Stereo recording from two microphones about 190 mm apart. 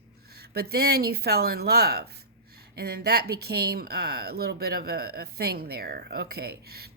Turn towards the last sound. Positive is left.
turn(degrees=-55)  # may be behind; listen again after turning